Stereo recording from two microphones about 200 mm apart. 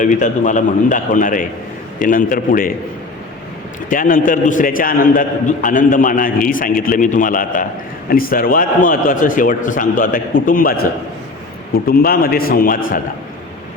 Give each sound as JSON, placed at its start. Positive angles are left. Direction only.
{"t": 0.0, "sound": "a man's voice", "side_deg": 40}
{"t": 3.8, "sound": "a man's voice", "side_deg": 40}